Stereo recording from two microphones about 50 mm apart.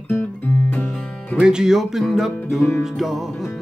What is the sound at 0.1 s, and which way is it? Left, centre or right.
Music, left.